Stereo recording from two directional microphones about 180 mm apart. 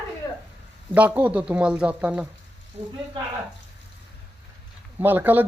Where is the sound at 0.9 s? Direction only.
10° right (ahead or behind).